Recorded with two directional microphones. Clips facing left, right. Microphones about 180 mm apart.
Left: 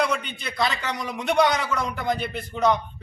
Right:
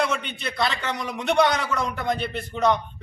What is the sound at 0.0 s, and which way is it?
A man's voice, centre (ahead or behind).